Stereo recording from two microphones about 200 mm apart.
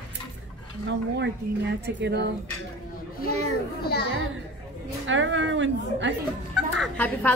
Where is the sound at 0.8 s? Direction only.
60° right (ahead or behind).